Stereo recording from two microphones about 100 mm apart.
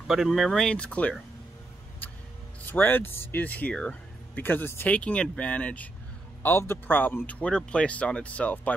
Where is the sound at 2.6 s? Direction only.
20° left (ahead or behind).